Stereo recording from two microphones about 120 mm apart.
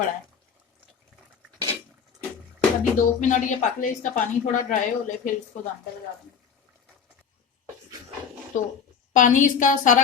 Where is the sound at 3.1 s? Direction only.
90° left.